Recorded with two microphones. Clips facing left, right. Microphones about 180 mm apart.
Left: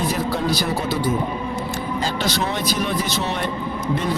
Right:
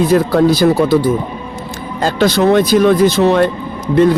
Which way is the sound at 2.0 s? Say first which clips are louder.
Right 13 dB; 50° right (ahead or behind).